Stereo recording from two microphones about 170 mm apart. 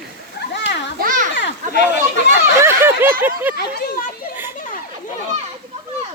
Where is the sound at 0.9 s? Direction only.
55° right (ahead or behind).